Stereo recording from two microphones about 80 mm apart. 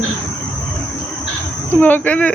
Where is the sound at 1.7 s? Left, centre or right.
Left.